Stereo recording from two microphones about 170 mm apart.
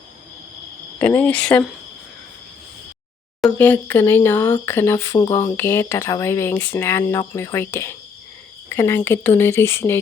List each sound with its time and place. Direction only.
0.9 s speech: 10° left (ahead or behind)
3.4 s speech: 10° left (ahead or behind)